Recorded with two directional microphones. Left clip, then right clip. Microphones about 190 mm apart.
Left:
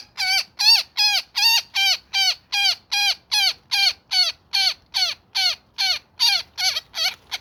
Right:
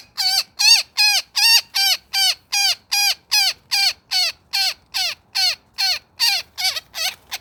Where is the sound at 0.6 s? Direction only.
15° right (ahead or behind).